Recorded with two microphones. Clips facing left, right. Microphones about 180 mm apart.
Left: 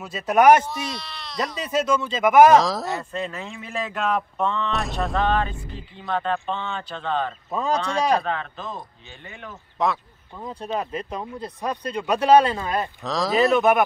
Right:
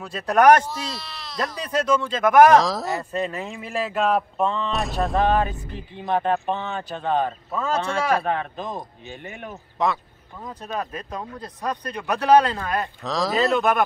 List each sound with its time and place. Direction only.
0.3 s speech: 10° left (ahead or behind)
5.3 s speech: 15° right (ahead or behind)
7.5 s speech: 15° left (ahead or behind)
8.2 s speech: 15° right (ahead or behind)
9.8 s speech: centre (ahead or behind)
10.4 s speech: 25° left (ahead or behind)
13.0 s speech: centre (ahead or behind)
13.4 s speech: 20° left (ahead or behind)